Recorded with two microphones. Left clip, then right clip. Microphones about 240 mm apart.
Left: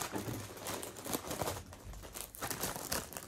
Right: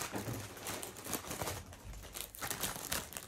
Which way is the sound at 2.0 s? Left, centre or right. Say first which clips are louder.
Even; left.